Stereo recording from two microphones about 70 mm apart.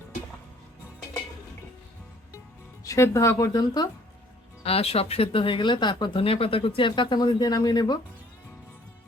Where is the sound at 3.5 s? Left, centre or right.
Left.